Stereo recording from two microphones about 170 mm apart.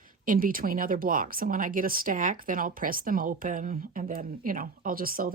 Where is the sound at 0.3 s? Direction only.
55° right (ahead or behind).